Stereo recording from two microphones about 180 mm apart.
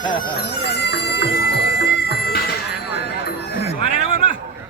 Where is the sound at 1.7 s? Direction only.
65° left (ahead or behind).